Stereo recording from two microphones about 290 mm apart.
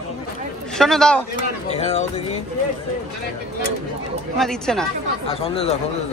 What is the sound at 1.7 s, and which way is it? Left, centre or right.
Speech, left.